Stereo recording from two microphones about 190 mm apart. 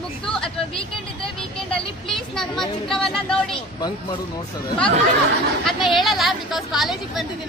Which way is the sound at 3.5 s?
25° left (ahead or behind).